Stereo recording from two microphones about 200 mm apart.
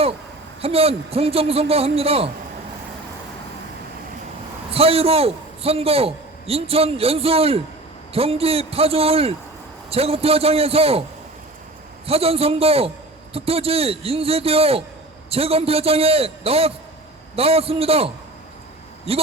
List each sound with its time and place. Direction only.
0.6 s a man's voice: 30° right (ahead or behind)
4.7 s a man's voice: 30° right (ahead or behind)
12.0 s a man's voice: 30° right (ahead or behind)